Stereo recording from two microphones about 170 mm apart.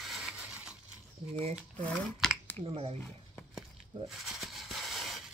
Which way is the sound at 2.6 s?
35° right (ahead or behind).